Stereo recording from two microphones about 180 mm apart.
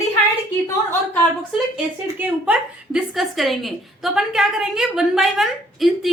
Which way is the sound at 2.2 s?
5° right (ahead or behind).